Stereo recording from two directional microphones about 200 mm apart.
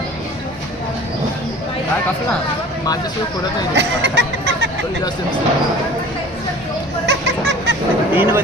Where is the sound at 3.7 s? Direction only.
60° right (ahead or behind).